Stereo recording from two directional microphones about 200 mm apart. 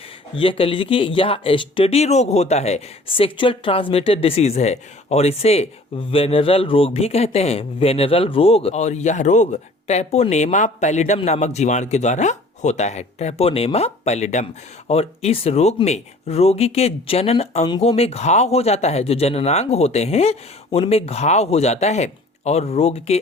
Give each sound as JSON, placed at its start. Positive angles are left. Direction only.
{"t": 0.3, "sound": "speech", "side_deg": 25}